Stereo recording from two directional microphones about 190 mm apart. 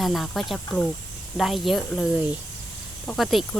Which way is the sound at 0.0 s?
Centre (ahead or behind).